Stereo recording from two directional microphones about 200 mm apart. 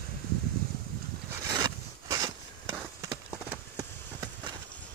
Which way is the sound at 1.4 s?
20° right (ahead or behind).